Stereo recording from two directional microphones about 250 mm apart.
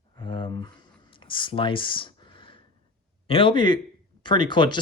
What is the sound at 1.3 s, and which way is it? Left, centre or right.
Speech, centre.